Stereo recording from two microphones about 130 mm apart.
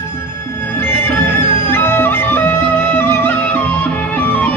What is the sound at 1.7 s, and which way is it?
Music, 15° left (ahead or behind).